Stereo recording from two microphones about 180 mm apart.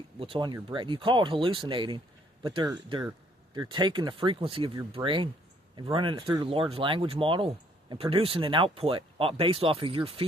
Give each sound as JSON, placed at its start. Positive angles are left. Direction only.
{"t": 0.2, "sound": "speech", "side_deg": -25}